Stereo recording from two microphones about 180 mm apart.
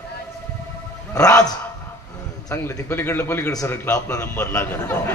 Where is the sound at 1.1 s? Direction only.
20° left (ahead or behind).